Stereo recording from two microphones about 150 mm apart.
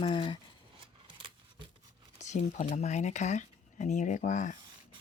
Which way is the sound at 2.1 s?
50° left (ahead or behind).